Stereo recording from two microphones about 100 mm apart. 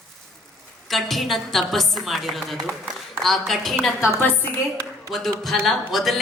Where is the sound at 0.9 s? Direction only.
Centre (ahead or behind).